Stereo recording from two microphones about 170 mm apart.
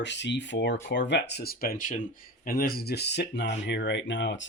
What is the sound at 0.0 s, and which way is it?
Speech, 90° left.